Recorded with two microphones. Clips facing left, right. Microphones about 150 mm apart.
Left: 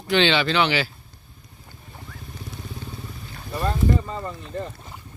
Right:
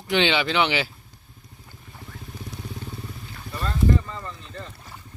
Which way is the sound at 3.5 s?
25° left (ahead or behind).